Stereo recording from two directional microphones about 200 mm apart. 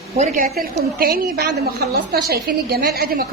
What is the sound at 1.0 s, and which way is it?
A woman's voice, 50° right (ahead or behind).